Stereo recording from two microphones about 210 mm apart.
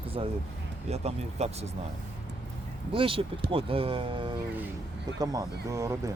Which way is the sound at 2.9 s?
25° right (ahead or behind).